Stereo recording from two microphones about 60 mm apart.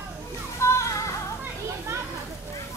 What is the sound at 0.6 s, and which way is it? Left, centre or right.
Music, left.